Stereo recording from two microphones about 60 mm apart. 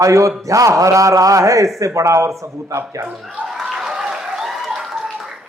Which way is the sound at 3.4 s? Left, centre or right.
Centre.